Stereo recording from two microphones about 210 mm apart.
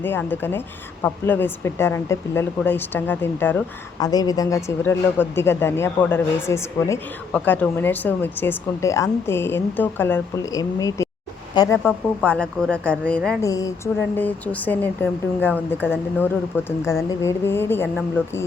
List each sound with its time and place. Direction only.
0.0 s a woman's voice: 10° left (ahead or behind)
11.8 s a woman's voice: 5° left (ahead or behind)
13.4 s a woman's voice: 15° left (ahead or behind)